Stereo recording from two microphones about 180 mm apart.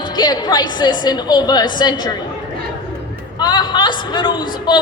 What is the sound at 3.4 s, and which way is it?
A man's voice, 25° left (ahead or behind).